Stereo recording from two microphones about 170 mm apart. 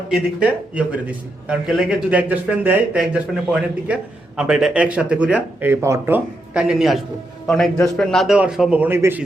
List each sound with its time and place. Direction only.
0.3 s a man's voice: 10° right (ahead or behind)